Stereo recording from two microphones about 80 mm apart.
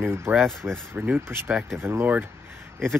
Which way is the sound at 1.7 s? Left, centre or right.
Right.